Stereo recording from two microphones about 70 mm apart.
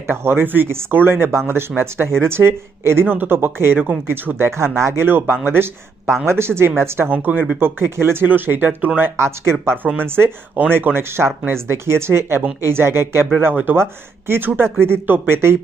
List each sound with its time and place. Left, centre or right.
0.1 s speech: right